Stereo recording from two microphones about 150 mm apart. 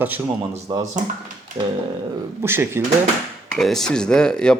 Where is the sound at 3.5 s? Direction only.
5° left (ahead or behind).